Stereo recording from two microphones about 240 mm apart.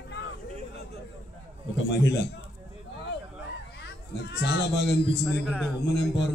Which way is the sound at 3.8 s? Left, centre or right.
Left.